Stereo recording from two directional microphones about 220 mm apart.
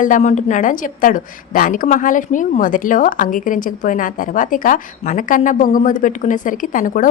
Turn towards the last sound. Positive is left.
turn(degrees=40)  # may be behind; listen again after turning